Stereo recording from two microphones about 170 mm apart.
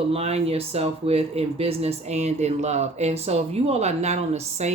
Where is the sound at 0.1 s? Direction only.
40° right (ahead or behind).